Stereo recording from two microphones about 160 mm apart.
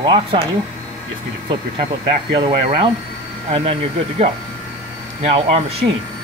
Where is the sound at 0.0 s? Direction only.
35° right (ahead or behind).